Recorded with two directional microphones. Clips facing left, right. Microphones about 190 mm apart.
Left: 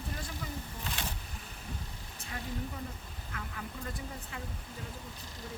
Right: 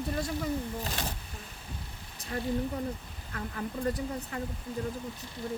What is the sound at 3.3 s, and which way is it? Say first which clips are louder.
Speech: right 7 dB; 40° right (ahead or behind).